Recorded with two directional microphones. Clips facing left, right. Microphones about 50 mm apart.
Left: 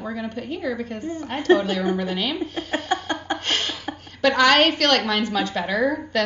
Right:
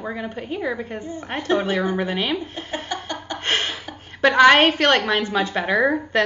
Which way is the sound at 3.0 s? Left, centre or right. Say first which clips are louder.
Left 4 dB; left.